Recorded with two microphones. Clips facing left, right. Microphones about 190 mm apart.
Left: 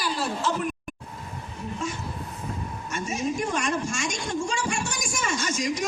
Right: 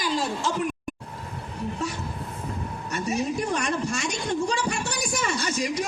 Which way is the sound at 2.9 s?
35° right (ahead or behind).